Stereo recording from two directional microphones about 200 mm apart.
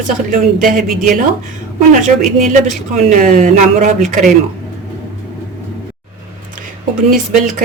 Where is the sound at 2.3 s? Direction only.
40° right (ahead or behind).